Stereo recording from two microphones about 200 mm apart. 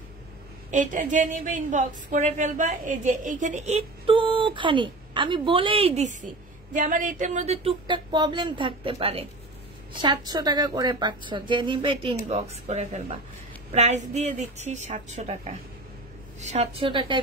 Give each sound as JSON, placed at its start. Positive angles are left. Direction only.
{"t": 0.7, "sound": "a woman's voice", "side_deg": -40}